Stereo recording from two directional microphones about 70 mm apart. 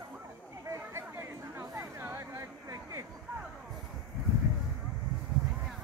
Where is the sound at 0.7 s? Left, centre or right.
Right.